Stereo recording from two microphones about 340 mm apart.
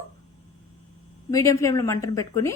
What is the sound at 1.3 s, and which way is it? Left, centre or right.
A woman's voice, centre.